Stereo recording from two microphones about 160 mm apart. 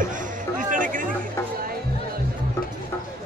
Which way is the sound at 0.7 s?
55° right (ahead or behind).